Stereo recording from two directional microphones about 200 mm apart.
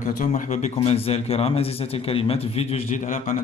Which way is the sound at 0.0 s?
40° left (ahead or behind).